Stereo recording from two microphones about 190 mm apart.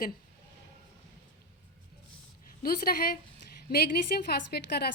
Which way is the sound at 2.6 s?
50° left (ahead or behind).